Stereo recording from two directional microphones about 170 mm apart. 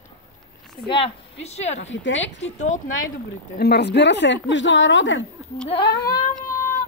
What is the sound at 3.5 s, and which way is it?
A woman's voice, 70° left (ahead or behind).